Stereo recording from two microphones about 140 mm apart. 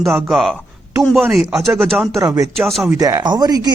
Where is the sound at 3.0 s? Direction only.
30° right (ahead or behind).